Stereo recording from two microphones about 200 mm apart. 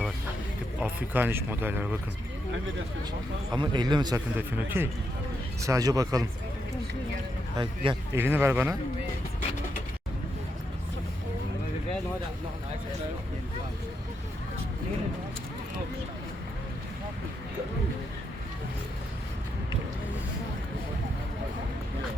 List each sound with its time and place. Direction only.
0.8 s speech: 10° right (ahead or behind)
3.5 s speech: 20° right (ahead or behind)
4.4 s speech: 10° right (ahead or behind)
8.1 s speech: 10° right (ahead or behind)